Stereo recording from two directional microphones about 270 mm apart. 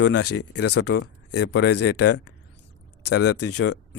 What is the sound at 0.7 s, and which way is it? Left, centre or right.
Speech, left.